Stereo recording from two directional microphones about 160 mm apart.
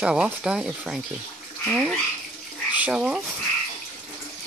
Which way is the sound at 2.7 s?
10° right (ahead or behind).